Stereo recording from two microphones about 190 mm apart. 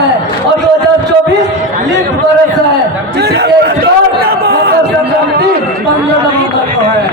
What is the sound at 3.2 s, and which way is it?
Chatter, 60° right (ahead or behind).